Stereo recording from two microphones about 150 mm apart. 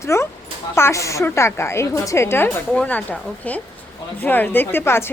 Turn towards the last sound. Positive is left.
turn(degrees=15)  # may be behind; listen again after turning